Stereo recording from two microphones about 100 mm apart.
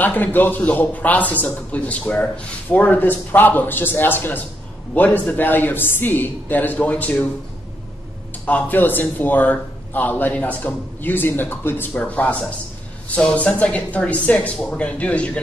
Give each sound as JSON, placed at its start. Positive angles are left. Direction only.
{"t": 0.0, "sound": "a man's voice", "side_deg": 15}
{"t": 8.5, "sound": "a man's voice", "side_deg": 15}